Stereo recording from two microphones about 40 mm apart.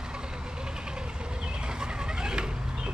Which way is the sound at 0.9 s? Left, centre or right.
Right.